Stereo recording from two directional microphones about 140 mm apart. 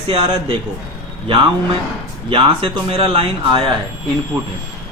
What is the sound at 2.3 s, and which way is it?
Speech, 40° right (ahead or behind).